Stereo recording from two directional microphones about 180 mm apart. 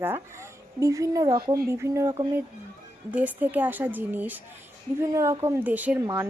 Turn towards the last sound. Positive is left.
turn(degrees=-15)  # may be behind; listen again after turning